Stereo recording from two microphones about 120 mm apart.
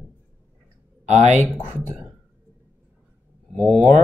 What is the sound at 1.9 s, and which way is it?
Whispering, 15° right (ahead or behind).